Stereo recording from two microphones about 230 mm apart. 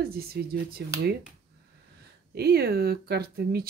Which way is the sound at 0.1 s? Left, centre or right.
Right.